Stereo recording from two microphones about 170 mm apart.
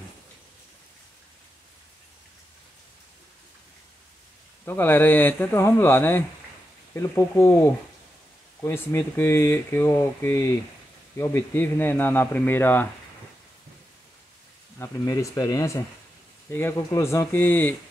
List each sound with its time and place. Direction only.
4.6 s speech: 10° left (ahead or behind)
14.8 s speech: 20° left (ahead or behind)